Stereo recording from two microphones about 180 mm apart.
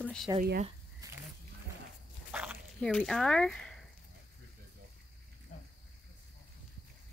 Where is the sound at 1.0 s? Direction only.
20° right (ahead or behind).